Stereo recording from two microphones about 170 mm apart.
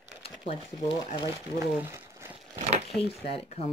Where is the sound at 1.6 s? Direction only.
15° right (ahead or behind).